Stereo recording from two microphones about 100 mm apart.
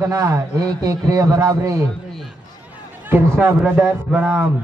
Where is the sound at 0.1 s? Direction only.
35° right (ahead or behind).